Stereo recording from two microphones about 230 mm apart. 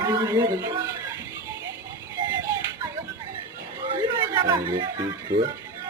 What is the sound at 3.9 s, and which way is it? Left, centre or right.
Music, centre.